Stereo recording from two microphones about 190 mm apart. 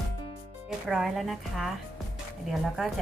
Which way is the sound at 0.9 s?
Centre (ahead or behind).